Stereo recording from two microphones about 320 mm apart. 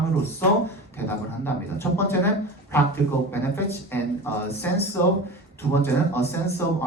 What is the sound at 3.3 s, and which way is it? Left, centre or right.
Speech, centre.